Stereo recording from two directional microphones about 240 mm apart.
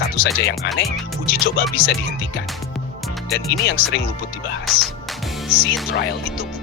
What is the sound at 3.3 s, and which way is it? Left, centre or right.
Speech, left.